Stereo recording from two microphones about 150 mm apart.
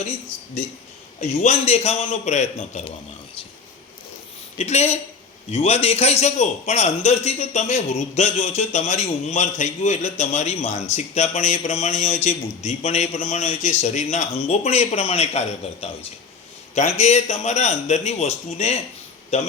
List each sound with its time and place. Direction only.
1.2 s a man's voice: 45° left (ahead or behind)
4.5 s a man's voice: 50° left (ahead or behind)